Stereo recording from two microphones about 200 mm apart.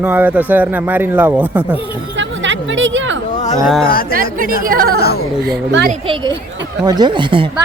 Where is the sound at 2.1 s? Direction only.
65° right (ahead or behind).